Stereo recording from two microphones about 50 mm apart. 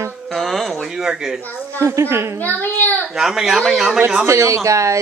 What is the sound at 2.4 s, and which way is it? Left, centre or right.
Speech, left.